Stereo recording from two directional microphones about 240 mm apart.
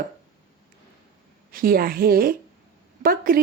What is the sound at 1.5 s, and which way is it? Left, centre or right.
Speech, right.